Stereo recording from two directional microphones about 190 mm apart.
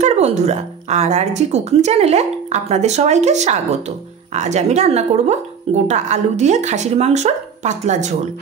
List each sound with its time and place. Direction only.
0.0 s a woman's voice: 35° right (ahead or behind)